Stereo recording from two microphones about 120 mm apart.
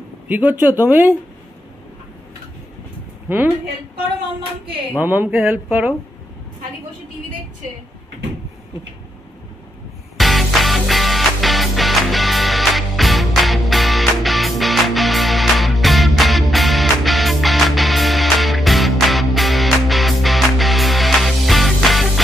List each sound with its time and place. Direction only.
0.3 s speech: 15° right (ahead or behind)
3.3 s a woman's voice: 15° right (ahead or behind)
4.9 s speech: 15° right (ahead or behind)
10.1 s music: centre (ahead or behind)